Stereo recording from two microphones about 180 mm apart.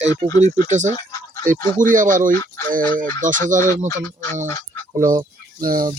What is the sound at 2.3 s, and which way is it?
Fowl, 15° left (ahead or behind).